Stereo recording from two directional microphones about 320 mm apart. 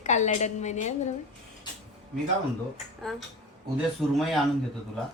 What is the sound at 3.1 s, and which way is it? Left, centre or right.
A woman's voice, centre.